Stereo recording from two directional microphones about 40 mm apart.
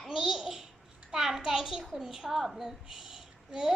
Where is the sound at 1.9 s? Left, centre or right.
Centre.